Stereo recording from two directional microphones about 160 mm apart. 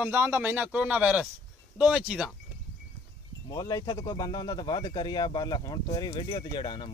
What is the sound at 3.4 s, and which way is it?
Speech, 25° left (ahead or behind).